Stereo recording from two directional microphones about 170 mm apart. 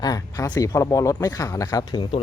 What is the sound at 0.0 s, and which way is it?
Speech, 20° left (ahead or behind).